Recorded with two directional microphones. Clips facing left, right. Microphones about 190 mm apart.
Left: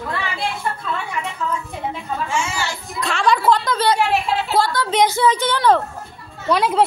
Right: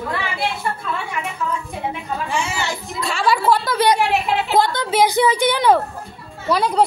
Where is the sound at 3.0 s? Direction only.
Centre (ahead or behind); by 4.9 s 20° right (ahead or behind).